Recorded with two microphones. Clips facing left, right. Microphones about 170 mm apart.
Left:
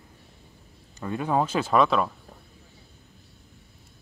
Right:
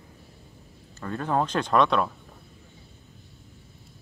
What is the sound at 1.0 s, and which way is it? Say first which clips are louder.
Speech: left 1 dB; 10° left (ahead or behind).